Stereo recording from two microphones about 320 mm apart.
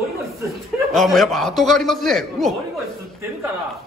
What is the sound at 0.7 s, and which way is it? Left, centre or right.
A man's voice, centre.